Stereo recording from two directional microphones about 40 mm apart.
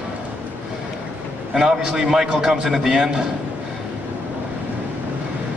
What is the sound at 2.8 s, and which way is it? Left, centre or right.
Speech, centre.